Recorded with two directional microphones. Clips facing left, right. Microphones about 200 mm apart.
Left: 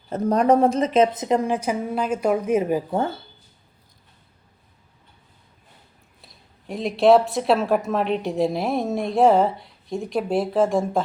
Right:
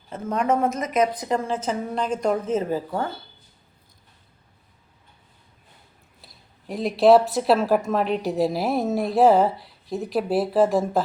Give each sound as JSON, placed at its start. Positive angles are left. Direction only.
{"t": 0.1, "sound": "a woman's voice", "side_deg": 35}
{"t": 6.2, "sound": "speech", "side_deg": 0}